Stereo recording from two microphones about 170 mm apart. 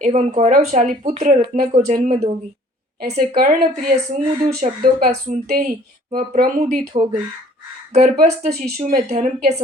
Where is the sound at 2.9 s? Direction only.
65° right (ahead or behind).